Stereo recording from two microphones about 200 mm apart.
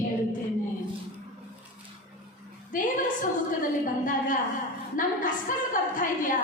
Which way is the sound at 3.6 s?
40° left (ahead or behind).